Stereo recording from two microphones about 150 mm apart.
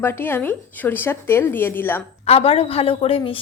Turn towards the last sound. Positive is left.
turn(degrees=35)  # may be behind; listen again after turning